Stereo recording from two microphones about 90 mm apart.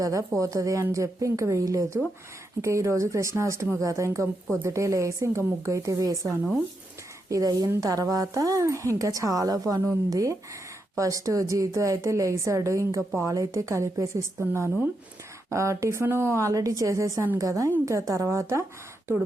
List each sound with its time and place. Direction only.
0.0 s a woman's voice: 40° right (ahead or behind)
6.2 s speech: centre (ahead or behind)
7.3 s a woman's voice: 40° right (ahead or behind)